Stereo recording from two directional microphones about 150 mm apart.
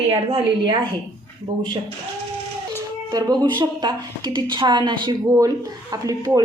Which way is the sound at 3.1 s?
25° right (ahead or behind).